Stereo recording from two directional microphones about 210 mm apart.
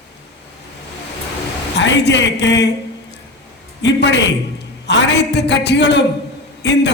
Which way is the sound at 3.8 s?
55° left (ahead or behind).